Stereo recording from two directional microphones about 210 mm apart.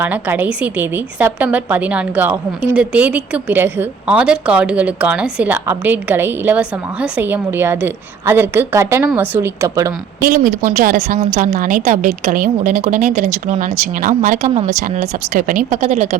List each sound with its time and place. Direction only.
0.0 s a woman's voice: 10° right (ahead or behind)
10.2 s a woman's voice: 40° right (ahead or behind)